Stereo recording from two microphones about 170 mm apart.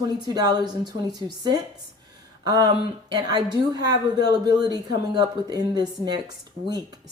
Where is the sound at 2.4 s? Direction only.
25° right (ahead or behind).